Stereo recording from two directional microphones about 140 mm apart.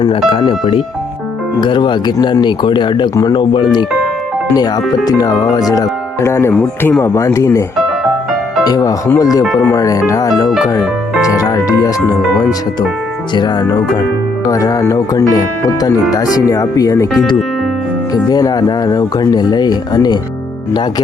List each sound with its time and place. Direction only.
0.0 s speech: 40° left (ahead or behind); by 7.6 s 20° left (ahead or behind)
8.6 s speech: 25° left (ahead or behind)
13.3 s speech: 30° left (ahead or behind)
18.1 s speech: 25° left (ahead or behind)